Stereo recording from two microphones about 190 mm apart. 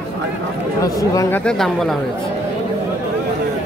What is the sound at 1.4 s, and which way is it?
Speech, 5° left (ahead or behind).